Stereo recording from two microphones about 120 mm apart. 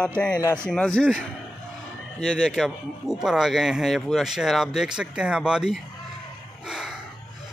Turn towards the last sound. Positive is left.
turn(degrees=-5)  # may be behind; listen again after turning